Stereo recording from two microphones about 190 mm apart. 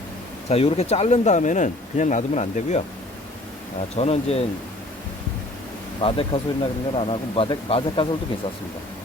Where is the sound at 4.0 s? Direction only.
35° left (ahead or behind).